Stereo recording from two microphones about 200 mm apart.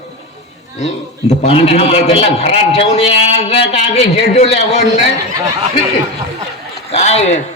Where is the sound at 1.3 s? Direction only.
30° left (ahead or behind).